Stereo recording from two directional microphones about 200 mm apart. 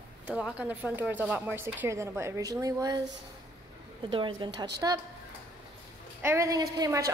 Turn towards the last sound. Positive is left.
turn(degrees=-20)  # may be behind; listen again after turning